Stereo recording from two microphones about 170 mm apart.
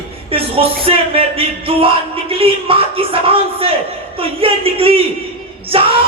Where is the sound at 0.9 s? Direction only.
35° right (ahead or behind).